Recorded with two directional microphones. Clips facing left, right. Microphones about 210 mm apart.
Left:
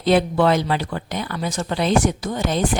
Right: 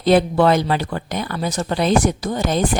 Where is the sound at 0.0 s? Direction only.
40° right (ahead or behind).